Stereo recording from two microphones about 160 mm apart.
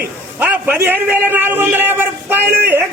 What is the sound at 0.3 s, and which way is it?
A man's voice, 10° right (ahead or behind).